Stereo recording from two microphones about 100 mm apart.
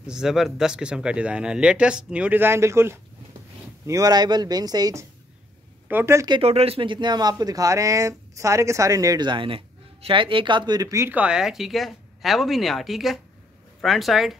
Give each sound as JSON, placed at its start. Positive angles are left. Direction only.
{"t": 0.0, "sound": "speech", "side_deg": -5}
{"t": 5.9, "sound": "speech", "side_deg": -25}
{"t": 6.4, "sound": "speech", "side_deg": -80}
{"t": 9.2, "sound": "a man's voice", "side_deg": -55}
{"t": 11.1, "sound": "speech", "side_deg": -10}